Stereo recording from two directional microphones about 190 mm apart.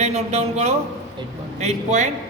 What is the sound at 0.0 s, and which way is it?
A man's voice, 35° right (ahead or behind).